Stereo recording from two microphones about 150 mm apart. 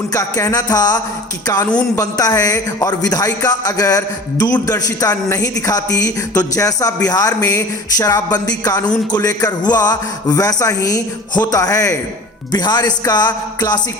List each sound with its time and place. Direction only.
0.1 s a man's voice: 25° left (ahead or behind)